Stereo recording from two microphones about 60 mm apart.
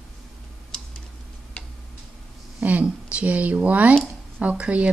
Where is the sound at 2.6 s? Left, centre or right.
Right.